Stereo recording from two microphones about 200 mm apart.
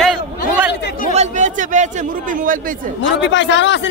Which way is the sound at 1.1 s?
35° right (ahead or behind).